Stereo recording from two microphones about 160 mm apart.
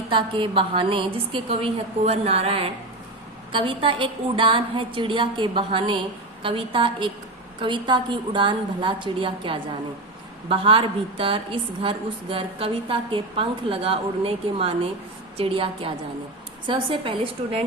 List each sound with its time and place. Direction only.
0.1 s a woman's voice: 30° right (ahead or behind)